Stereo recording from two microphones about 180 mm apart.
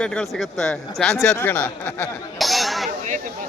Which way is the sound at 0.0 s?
5° left (ahead or behind).